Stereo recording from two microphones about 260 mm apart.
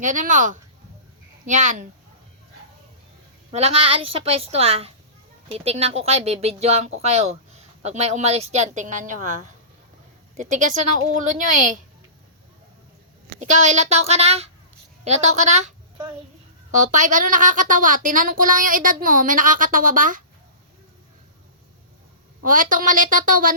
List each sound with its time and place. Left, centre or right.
0.0 s speech: right
3.5 s speech: right
13.4 s a woman's voice: right
22.4 s speech: right